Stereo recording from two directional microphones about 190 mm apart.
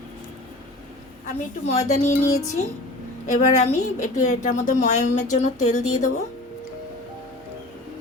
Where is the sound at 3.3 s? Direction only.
40° left (ahead or behind).